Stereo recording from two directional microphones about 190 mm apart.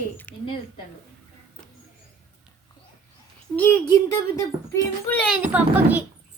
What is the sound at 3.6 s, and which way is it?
A child's voice, 10° left (ahead or behind).